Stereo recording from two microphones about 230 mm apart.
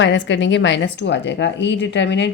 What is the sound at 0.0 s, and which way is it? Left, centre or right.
Speech, left.